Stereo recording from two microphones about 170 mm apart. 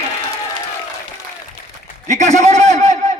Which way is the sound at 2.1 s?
45° right (ahead or behind).